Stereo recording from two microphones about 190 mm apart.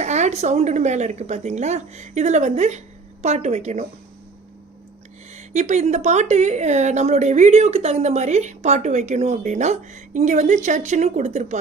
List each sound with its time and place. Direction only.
0.0 s a woman's voice: 35° right (ahead or behind)
5.3 s a woman's voice: 40° right (ahead or behind)